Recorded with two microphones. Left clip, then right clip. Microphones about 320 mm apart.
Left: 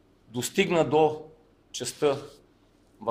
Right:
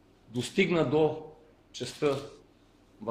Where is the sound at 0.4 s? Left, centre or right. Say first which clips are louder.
Left 3 dB; left.